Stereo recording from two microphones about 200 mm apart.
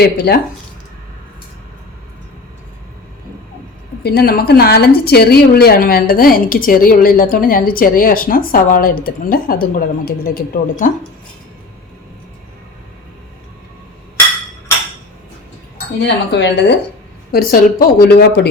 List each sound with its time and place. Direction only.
0.0 s a woman's voice: 55° left (ahead or behind)
4.0 s a woman's voice: 50° left (ahead or behind)
16.0 s speech: 60° left (ahead or behind)
17.3 s a woman's voice: 45° left (ahead or behind)